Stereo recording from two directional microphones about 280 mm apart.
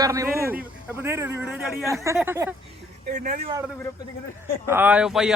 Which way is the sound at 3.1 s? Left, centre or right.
Right.